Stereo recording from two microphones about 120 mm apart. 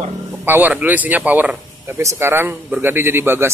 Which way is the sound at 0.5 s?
15° right (ahead or behind).